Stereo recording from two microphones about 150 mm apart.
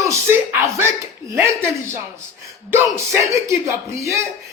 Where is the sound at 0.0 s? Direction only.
20° right (ahead or behind).